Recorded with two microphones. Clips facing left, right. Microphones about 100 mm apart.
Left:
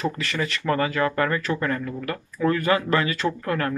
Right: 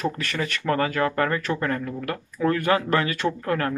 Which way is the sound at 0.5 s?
45° right (ahead or behind).